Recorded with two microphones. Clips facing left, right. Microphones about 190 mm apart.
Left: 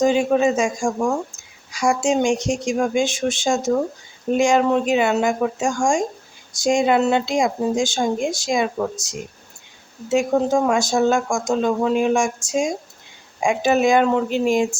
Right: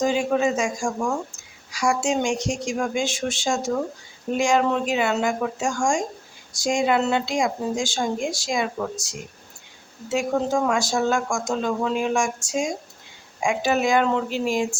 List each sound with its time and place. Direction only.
0.0 s speech: 20° left (ahead or behind)